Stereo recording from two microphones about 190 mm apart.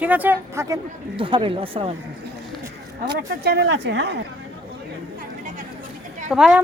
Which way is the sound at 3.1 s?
60° right (ahead or behind).